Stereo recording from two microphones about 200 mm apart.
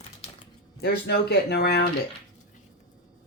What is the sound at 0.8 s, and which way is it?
Speech, 55° left (ahead or behind).